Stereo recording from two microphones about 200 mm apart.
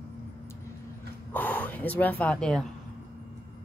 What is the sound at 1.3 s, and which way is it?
Speech, 10° left (ahead or behind).